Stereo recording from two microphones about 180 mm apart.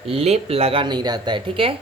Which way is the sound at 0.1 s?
35° right (ahead or behind).